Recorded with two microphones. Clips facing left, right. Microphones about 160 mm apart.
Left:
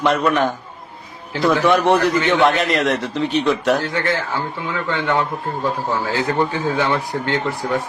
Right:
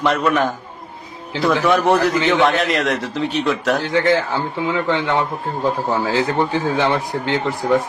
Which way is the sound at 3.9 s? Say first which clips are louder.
Right 5 dB; 20° right (ahead or behind).